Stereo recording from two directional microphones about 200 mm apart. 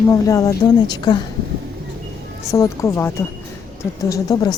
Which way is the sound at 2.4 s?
15° left (ahead or behind).